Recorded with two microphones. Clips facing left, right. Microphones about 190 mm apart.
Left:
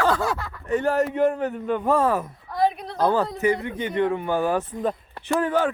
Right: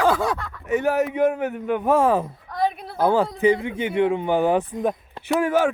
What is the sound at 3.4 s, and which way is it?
Speech, 15° right (ahead or behind).